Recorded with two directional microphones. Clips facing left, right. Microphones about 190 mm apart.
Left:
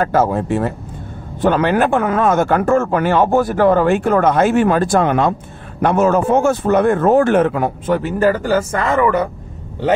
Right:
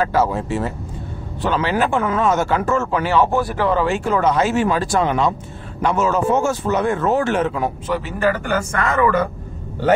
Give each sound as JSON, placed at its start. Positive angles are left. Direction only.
{"t": 0.0, "sound": "speech", "side_deg": 50}